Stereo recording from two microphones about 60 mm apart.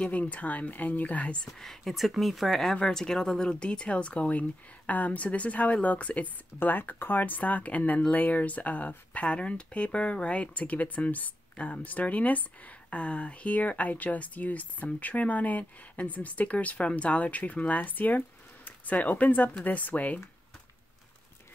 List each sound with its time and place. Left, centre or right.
0.0 s speech: left
1.4 s speech: centre
2.5 s speech: centre; by 20.2 s left